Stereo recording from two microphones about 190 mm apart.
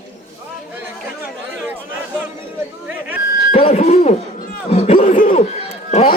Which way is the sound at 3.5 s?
35° left (ahead or behind).